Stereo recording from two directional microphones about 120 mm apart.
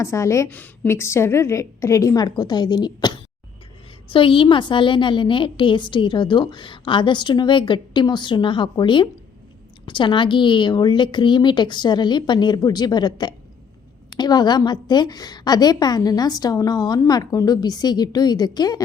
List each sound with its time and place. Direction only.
0.0 s a woman's voice: 25° left (ahead or behind)
0.4 s a woman's voice: 15° left (ahead or behind); by 18.8 s 35° left (ahead or behind)